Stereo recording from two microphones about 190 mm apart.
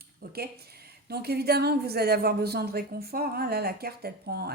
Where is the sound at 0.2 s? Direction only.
50° right (ahead or behind).